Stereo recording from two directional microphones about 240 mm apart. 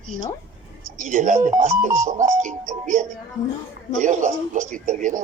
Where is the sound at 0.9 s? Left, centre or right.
Right.